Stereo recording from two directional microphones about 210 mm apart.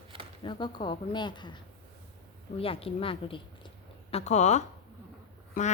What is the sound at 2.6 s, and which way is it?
Speech, 25° left (ahead or behind).